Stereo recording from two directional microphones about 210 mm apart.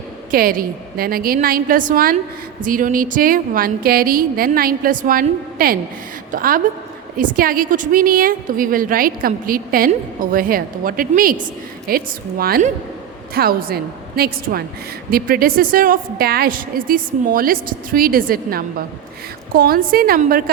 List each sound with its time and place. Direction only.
0.3 s a woman's voice: 45° right (ahead or behind)